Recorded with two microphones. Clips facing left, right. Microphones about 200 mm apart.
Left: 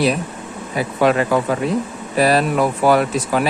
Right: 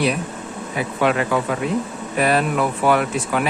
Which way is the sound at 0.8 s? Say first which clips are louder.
Left 3 dB; 35° left (ahead or behind).